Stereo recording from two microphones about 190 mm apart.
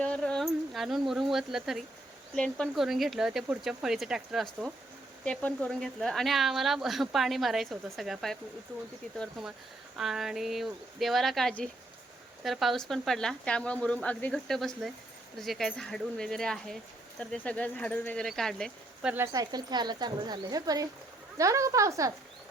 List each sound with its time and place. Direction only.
0.0 s speech: 5° left (ahead or behind)
19.1 s speech: 15° right (ahead or behind)